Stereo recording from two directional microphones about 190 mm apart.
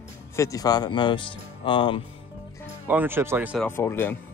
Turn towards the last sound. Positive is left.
turn(degrees=10)  # may be behind; listen again after turning